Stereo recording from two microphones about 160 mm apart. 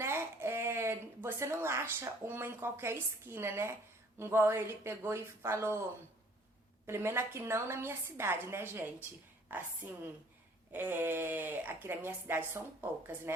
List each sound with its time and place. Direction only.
0.0 s a woman's voice: 15° right (ahead or behind)
6.8 s a woman's voice: 15° right (ahead or behind)